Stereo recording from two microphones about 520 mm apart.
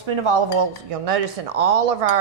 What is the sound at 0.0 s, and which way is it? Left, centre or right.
Speech, right.